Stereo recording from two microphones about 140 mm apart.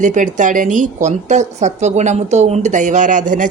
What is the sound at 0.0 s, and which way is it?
A woman's voice, 65° right (ahead or behind).